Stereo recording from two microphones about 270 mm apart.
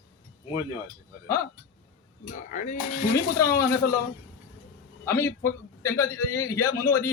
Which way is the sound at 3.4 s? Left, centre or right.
Centre.